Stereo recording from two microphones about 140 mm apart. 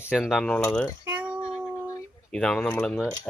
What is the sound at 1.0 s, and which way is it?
Mechanisms, 10° right (ahead or behind).